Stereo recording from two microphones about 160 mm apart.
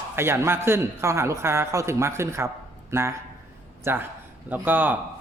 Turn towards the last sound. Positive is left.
turn(degrees=-10)  # may be behind; listen again after turning